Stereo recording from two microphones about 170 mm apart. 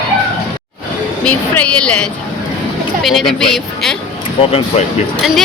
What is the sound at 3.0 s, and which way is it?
Speech, centre (ahead or behind).